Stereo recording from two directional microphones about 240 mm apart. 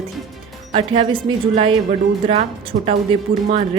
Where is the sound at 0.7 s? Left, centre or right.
Right.